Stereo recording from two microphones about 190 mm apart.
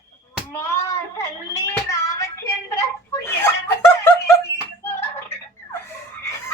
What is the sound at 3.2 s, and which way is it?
Snicker, 15° left (ahead or behind).